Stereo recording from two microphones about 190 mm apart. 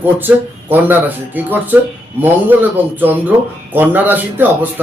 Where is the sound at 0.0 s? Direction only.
10° right (ahead or behind).